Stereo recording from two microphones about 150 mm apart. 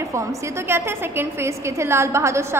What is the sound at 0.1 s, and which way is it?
A woman's voice, 20° right (ahead or behind).